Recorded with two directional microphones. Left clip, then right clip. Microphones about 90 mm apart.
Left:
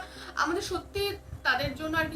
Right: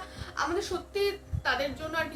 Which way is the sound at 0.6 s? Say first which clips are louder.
Right 2 dB; 35° left (ahead or behind).